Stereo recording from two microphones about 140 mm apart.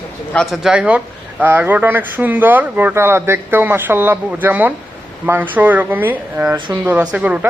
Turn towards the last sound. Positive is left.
turn(degrees=-10)  # may be behind; listen again after turning